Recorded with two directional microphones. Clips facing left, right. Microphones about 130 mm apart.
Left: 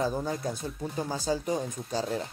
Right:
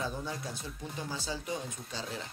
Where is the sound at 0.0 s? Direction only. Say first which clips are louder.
Left 8 dB; 45° left (ahead or behind).